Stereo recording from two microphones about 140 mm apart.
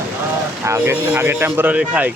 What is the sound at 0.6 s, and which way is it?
Speech, 20° right (ahead or behind).